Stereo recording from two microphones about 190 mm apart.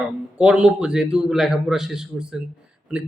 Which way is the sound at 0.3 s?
5° right (ahead or behind).